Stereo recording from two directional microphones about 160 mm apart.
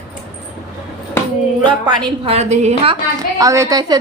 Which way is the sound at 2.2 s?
45° right (ahead or behind).